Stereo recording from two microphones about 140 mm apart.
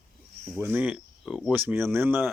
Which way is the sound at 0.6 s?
15° right (ahead or behind).